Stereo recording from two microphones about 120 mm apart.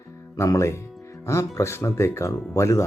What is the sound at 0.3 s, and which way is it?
Speech, 25° left (ahead or behind).